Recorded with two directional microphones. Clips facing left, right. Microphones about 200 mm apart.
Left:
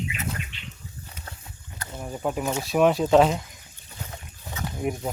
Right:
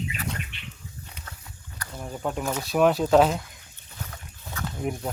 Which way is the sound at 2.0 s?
5° left (ahead or behind).